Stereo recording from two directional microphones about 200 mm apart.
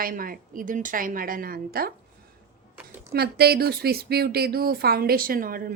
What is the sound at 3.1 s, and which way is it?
Speech, 50° right (ahead or behind).